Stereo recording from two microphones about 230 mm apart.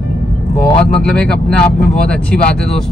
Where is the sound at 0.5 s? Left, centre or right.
Centre.